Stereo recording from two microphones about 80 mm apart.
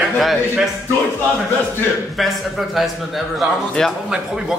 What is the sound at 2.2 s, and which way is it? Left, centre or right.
A man's voice, centre.